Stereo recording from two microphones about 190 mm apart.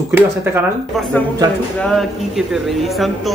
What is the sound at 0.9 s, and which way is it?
A man's voice, centre (ahead or behind).